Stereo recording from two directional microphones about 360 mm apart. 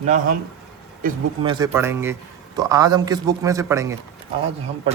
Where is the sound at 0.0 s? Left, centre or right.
Centre.